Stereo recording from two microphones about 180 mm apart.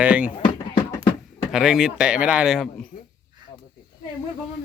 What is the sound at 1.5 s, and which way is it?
Speech, centre (ahead or behind).